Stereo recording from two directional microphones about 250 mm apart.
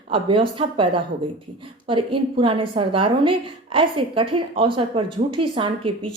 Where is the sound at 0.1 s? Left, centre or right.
Right.